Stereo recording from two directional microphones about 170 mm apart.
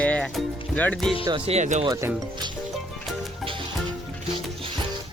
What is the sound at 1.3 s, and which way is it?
Speech, 40° right (ahead or behind).